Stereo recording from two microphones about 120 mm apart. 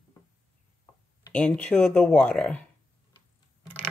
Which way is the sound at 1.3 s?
10° left (ahead or behind).